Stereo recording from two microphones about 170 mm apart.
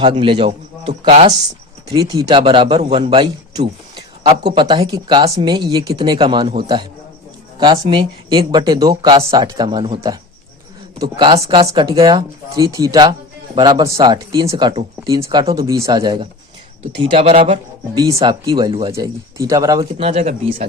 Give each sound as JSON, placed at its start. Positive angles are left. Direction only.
{"t": 0.0, "sound": "a man's voice", "side_deg": -30}
{"t": 1.9, "sound": "speech", "side_deg": -25}
{"t": 7.6, "sound": "a man's voice", "side_deg": -30}
{"t": 17.9, "sound": "speech", "side_deg": -20}
{"t": 20.0, "sound": "a man's voice", "side_deg": -35}